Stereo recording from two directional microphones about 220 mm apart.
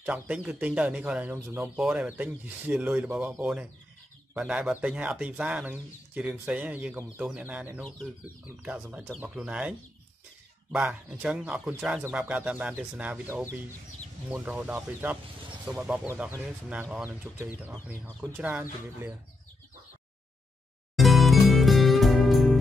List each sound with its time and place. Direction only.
0.0 s speech: 5° right (ahead or behind)
20.9 s music: centre (ahead or behind)